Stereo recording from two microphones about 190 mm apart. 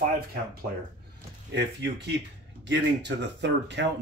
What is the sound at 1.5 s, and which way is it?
Speech, 65° right (ahead or behind).